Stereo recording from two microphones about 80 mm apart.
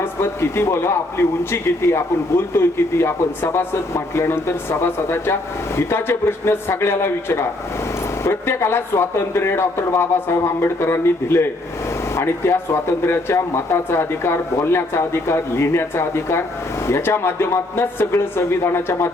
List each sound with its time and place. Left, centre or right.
0.0 s a man's voice: left